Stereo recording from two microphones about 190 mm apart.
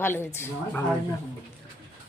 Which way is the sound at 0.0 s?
10° left (ahead or behind).